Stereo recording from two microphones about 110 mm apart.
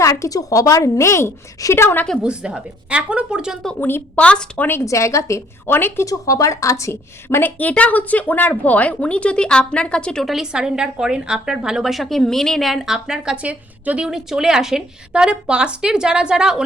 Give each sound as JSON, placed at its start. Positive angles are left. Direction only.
{"t": 0.0, "sound": "a woman's voice", "side_deg": 30}
{"t": 2.2, "sound": "speech", "side_deg": -5}
{"t": 3.8, "sound": "a woman's voice", "side_deg": 20}